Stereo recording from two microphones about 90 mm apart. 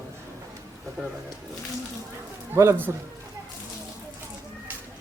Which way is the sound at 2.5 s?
30° right (ahead or behind).